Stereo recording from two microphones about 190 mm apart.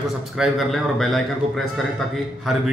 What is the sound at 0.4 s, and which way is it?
Speech, centre (ahead or behind).